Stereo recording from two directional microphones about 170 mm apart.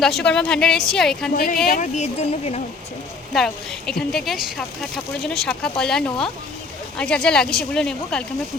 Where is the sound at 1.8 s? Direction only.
45° left (ahead or behind).